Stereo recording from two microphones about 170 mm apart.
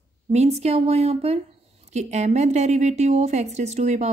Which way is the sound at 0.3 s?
40° right (ahead or behind).